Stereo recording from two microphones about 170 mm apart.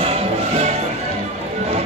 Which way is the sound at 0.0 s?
35° right (ahead or behind).